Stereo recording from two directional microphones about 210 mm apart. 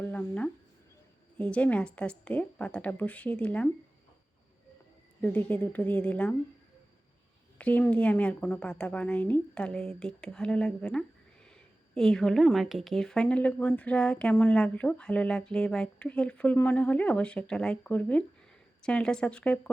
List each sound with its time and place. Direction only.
0.0 s a sound: 10° left (ahead or behind)
1.4 s speech: 5° left (ahead or behind)
5.2 s a woman's voice: 10° left (ahead or behind)
7.6 s speech: 5° left (ahead or behind)